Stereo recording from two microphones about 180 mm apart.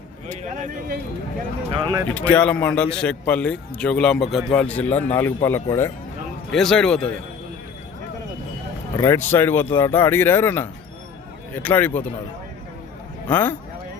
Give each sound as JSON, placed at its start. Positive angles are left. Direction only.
{"t": 0.5, "sound": "speech", "side_deg": -45}
{"t": 1.7, "sound": "speech", "side_deg": -20}
{"t": 2.0, "sound": "a man's voice", "side_deg": 10}
{"t": 6.5, "sound": "a man's voice", "side_deg": 5}
{"t": 9.0, "sound": "a man's voice", "side_deg": 15}
{"t": 13.2, "sound": "a man's voice", "side_deg": 10}